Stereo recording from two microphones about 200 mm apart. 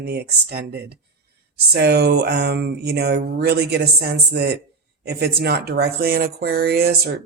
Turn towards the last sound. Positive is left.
turn(degrees=-50)  # may be behind; listen again after turning